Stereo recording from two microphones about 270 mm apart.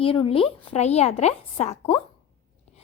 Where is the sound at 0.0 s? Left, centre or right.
Centre.